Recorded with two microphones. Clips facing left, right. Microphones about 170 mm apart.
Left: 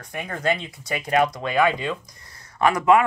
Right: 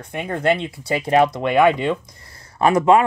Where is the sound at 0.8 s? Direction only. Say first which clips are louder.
Right 4 dB; 30° right (ahead or behind).